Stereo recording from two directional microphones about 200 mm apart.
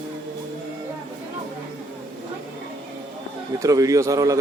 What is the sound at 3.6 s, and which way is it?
Speech, 15° right (ahead or behind).